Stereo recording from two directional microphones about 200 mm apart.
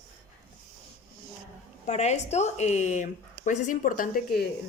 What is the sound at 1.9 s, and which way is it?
Speech, 35° left (ahead or behind).